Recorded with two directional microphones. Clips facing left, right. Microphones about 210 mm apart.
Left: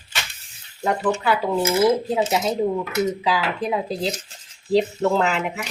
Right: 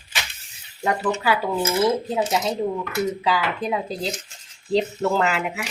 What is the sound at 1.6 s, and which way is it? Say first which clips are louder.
Speech: left 4 dB; 15° left (ahead or behind).